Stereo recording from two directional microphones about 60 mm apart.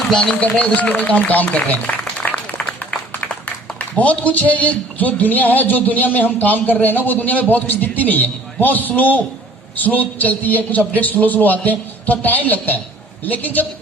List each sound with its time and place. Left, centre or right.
0.1 s speech: centre
2.6 s a sound: centre
3.9 s a man's voice: left